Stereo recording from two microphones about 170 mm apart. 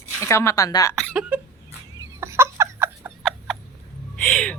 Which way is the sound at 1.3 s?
10° right (ahead or behind).